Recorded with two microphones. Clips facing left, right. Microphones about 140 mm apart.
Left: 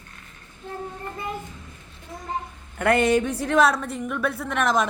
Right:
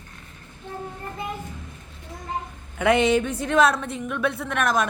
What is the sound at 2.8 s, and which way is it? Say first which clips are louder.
A woman's voice: even; 5° left (ahead or behind).